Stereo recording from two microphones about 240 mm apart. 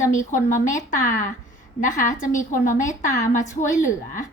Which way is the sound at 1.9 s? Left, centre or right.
Left.